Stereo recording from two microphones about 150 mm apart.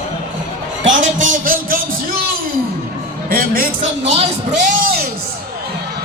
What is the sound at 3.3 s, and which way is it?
Speech, 75° right (ahead or behind).